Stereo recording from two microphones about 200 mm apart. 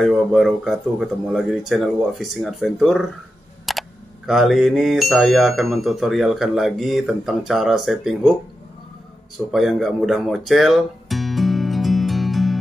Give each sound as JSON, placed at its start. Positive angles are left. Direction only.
{"t": 0.0, "sound": "speech", "side_deg": 0}
{"t": 3.7, "sound": "camera", "side_deg": 0}
{"t": 4.3, "sound": "speech", "side_deg": 0}
{"t": 9.5, "sound": "music", "side_deg": 0}